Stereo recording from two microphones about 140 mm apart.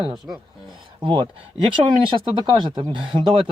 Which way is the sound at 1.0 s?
35° right (ahead or behind).